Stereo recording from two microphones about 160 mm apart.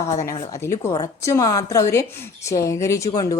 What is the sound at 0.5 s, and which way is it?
A woman's voice, 15° left (ahead or behind).